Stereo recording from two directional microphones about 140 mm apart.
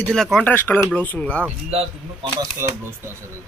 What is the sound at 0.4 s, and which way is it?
Speech, 15° left (ahead or behind).